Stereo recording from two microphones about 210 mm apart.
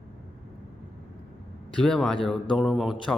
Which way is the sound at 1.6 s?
Centre (ahead or behind).